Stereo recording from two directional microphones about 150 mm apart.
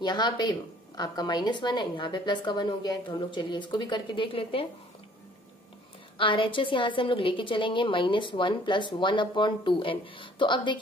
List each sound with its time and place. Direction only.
0.0 s a woman's voice: 30° left (ahead or behind)
6.1 s a woman's voice: 35° left (ahead or behind)